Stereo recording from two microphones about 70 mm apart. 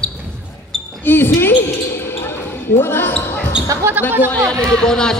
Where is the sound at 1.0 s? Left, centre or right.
Left.